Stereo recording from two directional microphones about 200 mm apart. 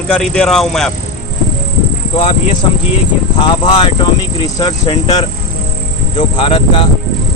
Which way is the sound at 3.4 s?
25° left (ahead or behind).